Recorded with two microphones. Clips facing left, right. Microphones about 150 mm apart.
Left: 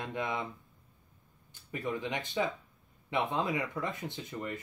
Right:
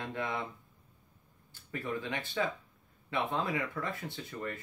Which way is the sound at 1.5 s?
15° left (ahead or behind).